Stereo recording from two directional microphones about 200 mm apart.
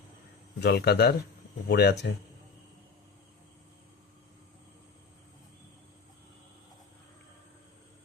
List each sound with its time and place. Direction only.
0.6 s speech: 55° left (ahead or behind)